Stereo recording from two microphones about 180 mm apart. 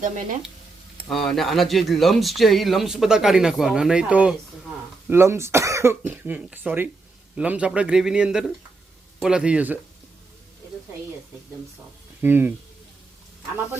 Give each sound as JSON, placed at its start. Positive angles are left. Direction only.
{"t": 0.0, "sound": "speech", "side_deg": -50}
{"t": 1.1, "sound": "speech", "side_deg": 0}
{"t": 12.2, "sound": "speech", "side_deg": -10}